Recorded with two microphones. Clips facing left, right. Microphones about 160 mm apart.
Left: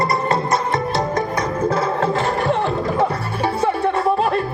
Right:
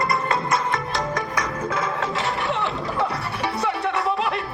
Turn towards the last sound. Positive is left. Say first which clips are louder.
# left 6 dB
turn(degrees=35)  # may be behind; listen again after turning